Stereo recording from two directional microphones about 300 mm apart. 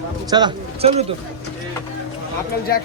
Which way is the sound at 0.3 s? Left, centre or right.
Centre.